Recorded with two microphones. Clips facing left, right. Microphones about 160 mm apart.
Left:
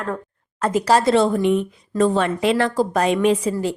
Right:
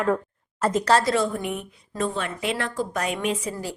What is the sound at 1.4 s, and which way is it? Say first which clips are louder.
A woman's voice: left 12 dB; 90° left.